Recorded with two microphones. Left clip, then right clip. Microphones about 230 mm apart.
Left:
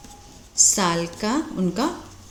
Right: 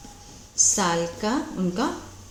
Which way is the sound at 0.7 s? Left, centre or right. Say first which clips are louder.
Left 1 dB; left.